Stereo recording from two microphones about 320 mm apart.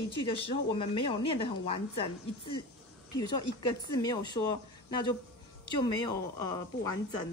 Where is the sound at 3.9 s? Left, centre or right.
Centre.